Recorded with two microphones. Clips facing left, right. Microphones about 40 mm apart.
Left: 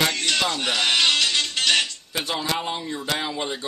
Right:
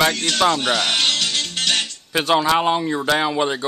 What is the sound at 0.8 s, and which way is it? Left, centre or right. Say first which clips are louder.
Speech: even; centre.